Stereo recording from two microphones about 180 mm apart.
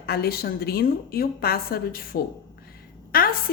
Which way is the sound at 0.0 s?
60° left (ahead or behind).